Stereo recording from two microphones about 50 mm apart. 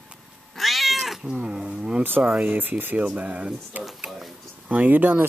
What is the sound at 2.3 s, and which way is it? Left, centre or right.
Speech, right.